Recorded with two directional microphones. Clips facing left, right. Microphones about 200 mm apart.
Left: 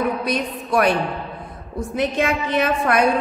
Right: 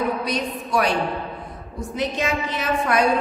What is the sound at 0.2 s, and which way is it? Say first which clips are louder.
Speech: left 2 dB; 55° left (ahead or behind).